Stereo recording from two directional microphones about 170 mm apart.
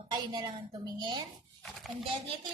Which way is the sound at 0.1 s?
25° right (ahead or behind).